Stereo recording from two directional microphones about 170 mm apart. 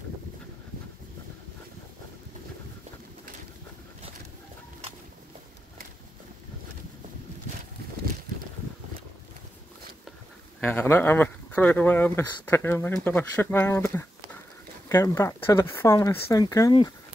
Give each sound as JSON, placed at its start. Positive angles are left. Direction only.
{"t": 10.6, "sound": "speech", "side_deg": 10}